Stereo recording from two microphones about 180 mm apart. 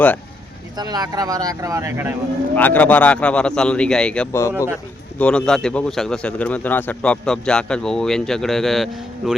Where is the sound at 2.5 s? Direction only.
10° left (ahead or behind).